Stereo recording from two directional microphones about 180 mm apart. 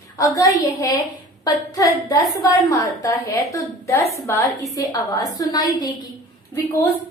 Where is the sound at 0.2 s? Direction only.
20° left (ahead or behind).